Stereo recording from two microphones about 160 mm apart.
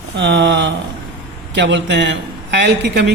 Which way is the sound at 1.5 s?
90° right.